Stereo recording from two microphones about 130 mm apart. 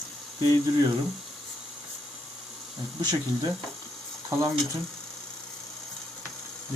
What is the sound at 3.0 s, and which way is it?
Speech, 30° right (ahead or behind).